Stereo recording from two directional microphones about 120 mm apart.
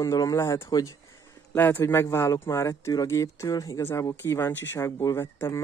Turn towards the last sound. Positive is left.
turn(degrees=20)  # may be behind; listen again after turning